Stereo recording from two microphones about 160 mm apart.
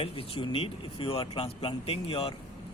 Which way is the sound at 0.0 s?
35° left (ahead or behind).